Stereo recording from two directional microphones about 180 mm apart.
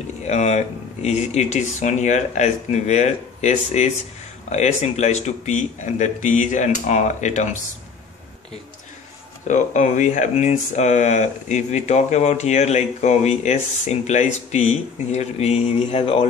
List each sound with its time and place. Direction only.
0.3 s speech: 40° left (ahead or behind)
9.5 s speech: 40° left (ahead or behind)